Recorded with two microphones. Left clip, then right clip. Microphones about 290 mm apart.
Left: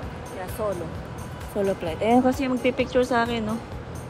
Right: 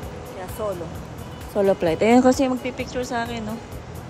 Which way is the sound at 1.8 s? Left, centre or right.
Right.